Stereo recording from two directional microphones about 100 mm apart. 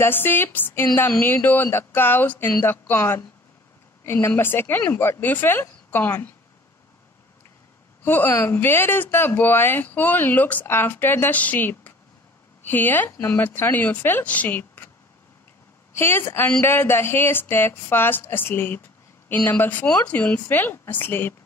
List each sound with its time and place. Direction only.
0.0 s a woman's voice: 20° left (ahead or behind)
8.0 s a woman's voice: 20° left (ahead or behind)
15.9 s a woman's voice: 25° left (ahead or behind)